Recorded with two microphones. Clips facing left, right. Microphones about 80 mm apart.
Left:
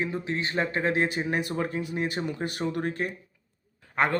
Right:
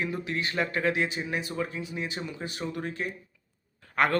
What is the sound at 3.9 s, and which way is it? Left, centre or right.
Speech, centre.